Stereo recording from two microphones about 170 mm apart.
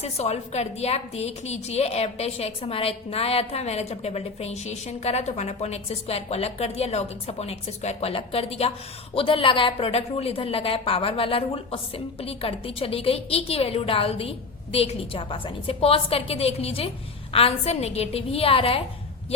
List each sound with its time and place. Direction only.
0.0 s a woman's voice: 40° left (ahead or behind)